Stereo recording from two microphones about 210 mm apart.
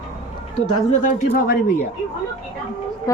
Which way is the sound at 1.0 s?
45° left (ahead or behind).